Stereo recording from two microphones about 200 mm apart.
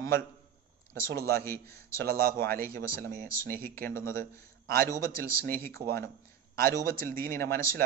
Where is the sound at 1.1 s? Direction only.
50° right (ahead or behind).